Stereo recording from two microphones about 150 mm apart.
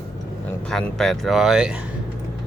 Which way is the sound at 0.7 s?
5° left (ahead or behind).